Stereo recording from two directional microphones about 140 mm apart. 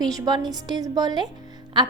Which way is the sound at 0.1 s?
30° right (ahead or behind).